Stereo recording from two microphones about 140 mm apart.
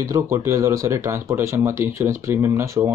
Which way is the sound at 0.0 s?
20° right (ahead or behind).